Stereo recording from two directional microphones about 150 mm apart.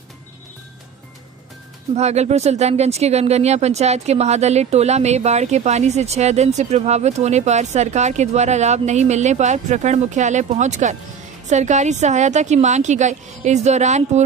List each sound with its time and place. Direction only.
2.0 s speech: 45° right (ahead or behind)